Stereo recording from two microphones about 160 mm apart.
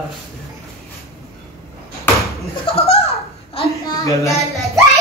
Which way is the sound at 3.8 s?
20° left (ahead or behind).